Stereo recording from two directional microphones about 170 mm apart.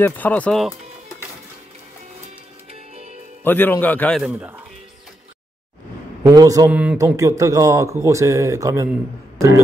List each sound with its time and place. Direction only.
0.0 s a man's voice: 10° left (ahead or behind)
3.4 s a man's voice: 10° left (ahead or behind)
4.2 s speech: 10° right (ahead or behind)
6.2 s speech: 20° right (ahead or behind)
6.7 s speech: 10° right (ahead or behind)